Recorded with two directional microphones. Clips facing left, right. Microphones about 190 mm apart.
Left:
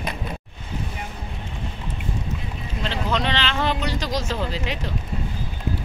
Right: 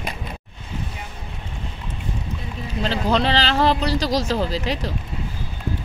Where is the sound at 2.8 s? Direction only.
35° right (ahead or behind).